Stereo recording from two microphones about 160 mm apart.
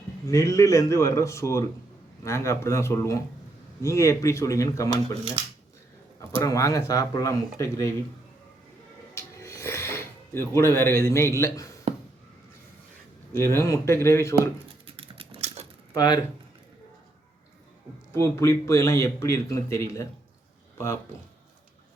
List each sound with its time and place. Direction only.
0.3 s speech: 20° left (ahead or behind)
6.4 s speech: 20° left (ahead or behind)
9.1 s music: 20° left (ahead or behind)
10.5 s speech: 15° left (ahead or behind)
13.3 s speech: 15° left (ahead or behind)
14.8 s typing: 35° right (ahead or behind)
16.0 s speech: 25° left (ahead or behind)
18.1 s a man's voice: 15° left (ahead or behind)